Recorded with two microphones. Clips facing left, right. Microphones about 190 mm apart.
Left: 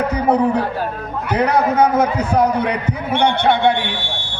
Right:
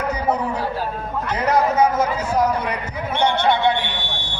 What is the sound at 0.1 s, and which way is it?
A man's voice, 60° left (ahead or behind).